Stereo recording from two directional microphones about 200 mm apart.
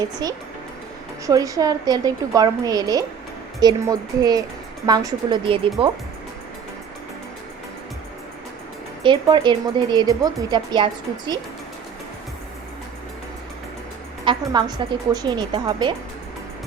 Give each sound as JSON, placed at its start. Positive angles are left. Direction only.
{"t": 0.2, "sound": "a woman's voice", "side_deg": -20}
{"t": 9.0, "sound": "speech", "side_deg": -20}
{"t": 14.3, "sound": "speech", "side_deg": -25}